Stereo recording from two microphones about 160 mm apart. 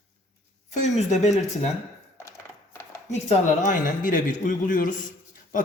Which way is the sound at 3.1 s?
50° left (ahead or behind).